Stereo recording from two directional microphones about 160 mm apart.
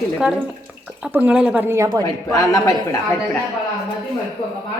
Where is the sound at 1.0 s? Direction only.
10° right (ahead or behind).